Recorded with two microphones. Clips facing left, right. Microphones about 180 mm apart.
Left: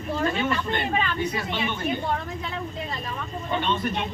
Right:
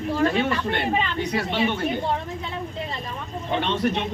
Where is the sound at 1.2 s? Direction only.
70° right (ahead or behind).